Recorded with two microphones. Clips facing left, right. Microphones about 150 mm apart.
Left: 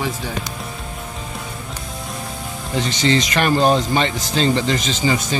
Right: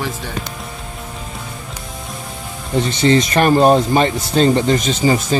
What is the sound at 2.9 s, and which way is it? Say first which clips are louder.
A man's voice: right 4 dB; 30° right (ahead or behind).